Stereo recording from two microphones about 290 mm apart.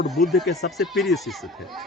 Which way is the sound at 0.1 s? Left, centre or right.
Centre.